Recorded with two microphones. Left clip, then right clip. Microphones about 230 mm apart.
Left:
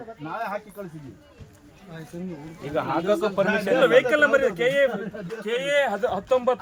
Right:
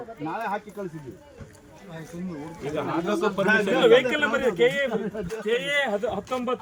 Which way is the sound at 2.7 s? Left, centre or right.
Centre.